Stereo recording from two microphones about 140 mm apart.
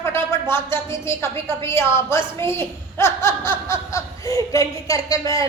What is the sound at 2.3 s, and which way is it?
A child's voice, 15° left (ahead or behind).